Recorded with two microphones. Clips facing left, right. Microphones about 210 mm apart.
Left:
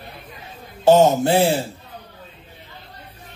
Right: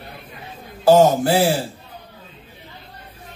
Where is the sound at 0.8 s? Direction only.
25° left (ahead or behind).